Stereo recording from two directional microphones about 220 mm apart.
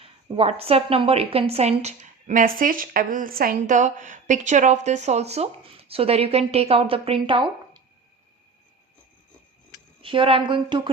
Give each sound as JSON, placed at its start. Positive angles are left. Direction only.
{"t": 0.0, "sound": "a woman's voice", "side_deg": -25}
{"t": 10.0, "sound": "a woman's voice", "side_deg": -25}